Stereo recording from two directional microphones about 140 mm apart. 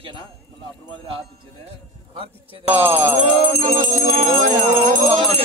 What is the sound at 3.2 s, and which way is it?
Bell, 45° right (ahead or behind).